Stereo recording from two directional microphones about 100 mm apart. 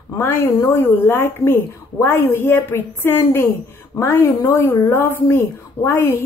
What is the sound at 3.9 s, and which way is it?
Speech, 35° left (ahead or behind).